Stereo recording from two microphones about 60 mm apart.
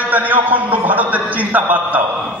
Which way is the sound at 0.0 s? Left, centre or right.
Right.